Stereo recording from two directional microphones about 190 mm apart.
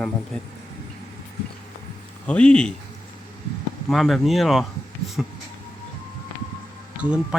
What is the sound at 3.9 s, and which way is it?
Speech, centre (ahead or behind).